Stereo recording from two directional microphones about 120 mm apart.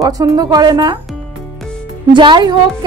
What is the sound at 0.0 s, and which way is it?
Speech, 30° right (ahead or behind).